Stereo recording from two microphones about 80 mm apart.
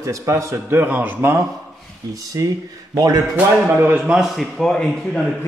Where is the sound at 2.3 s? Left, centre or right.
Right.